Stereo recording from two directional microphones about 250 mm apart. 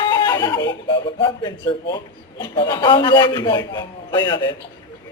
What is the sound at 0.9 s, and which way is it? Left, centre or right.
A man's voice, centre.